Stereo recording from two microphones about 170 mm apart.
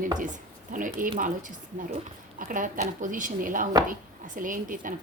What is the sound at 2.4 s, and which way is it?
Speech, 50° right (ahead or behind).